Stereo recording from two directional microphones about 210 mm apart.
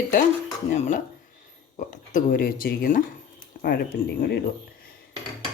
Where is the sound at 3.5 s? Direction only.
40° left (ahead or behind).